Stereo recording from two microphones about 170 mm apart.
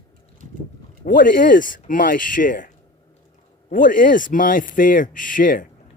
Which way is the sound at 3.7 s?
50° left (ahead or behind).